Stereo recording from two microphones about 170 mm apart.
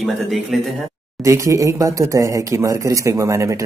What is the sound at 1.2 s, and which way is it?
Speech, 20° right (ahead or behind).